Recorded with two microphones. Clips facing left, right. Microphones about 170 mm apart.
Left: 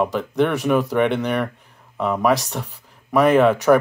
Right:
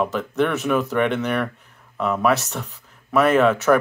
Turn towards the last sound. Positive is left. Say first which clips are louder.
# left 2 dB
turn(degrees=15)  # may be behind; listen again after turning